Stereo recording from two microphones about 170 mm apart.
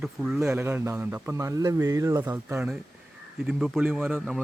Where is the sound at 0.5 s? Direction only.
15° right (ahead or behind).